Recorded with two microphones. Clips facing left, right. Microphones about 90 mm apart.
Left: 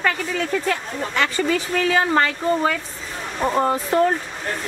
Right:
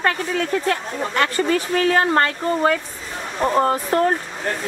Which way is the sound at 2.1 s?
5° right (ahead or behind).